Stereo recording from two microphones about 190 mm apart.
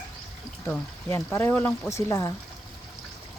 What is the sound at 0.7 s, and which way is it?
Speech, 10° left (ahead or behind).